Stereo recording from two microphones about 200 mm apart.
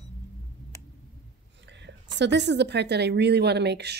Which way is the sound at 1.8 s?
60° right (ahead or behind).